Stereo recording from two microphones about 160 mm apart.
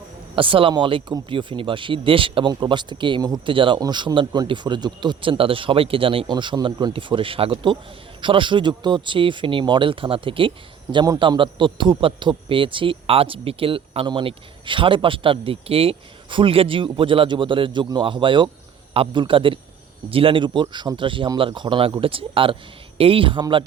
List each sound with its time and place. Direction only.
0.3 s speech: 35° right (ahead or behind)